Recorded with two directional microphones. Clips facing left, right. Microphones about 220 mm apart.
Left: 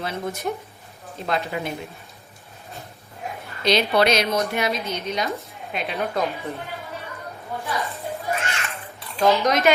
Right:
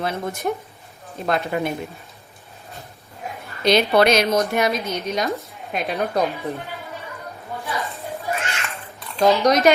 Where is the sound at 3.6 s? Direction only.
50° right (ahead or behind).